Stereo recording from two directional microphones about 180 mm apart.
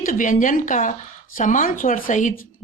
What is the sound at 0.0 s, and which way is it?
Speech, 45° left (ahead or behind).